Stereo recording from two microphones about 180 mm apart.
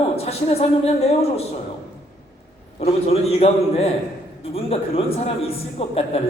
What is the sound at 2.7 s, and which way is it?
A man's voice, 35° left (ahead or behind).